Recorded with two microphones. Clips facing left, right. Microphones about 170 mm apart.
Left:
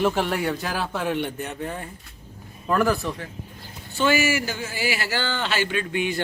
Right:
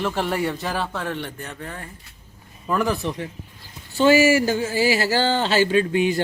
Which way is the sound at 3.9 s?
35° right (ahead or behind).